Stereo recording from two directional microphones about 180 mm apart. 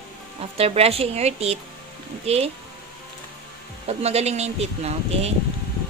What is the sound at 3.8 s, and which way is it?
Speech, 35° right (ahead or behind).